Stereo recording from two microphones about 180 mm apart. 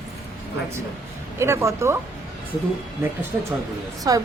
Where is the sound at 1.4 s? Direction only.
15° right (ahead or behind).